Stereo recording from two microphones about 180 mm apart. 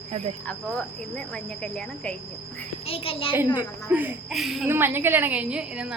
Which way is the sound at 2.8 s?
30° left (ahead or behind).